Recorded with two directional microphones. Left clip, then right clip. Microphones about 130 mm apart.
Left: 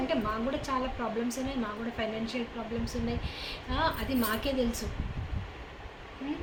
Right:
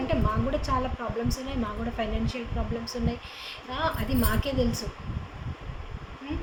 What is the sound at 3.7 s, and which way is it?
A woman's voice, 15° right (ahead or behind).